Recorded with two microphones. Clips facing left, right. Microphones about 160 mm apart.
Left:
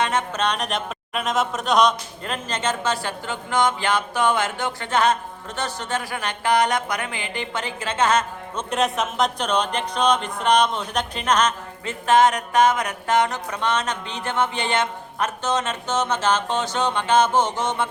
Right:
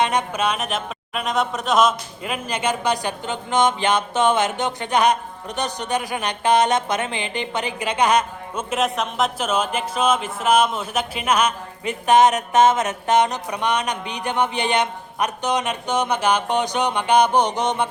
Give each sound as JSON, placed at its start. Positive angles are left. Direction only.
{"t": 0.0, "sound": "speech", "side_deg": -15}
{"t": 8.7, "sound": "speech", "side_deg": 0}